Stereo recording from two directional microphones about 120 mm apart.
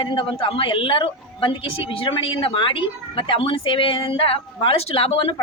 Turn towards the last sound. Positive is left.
turn(degrees=55)  # may be behind; listen again after turning